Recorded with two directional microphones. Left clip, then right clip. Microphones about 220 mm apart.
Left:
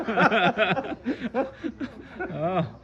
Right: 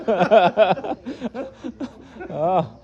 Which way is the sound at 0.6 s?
15° right (ahead or behind).